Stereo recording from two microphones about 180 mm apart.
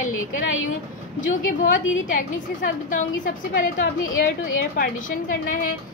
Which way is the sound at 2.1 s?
45° left (ahead or behind).